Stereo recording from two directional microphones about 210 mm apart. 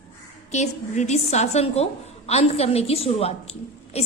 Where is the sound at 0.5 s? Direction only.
35° left (ahead or behind).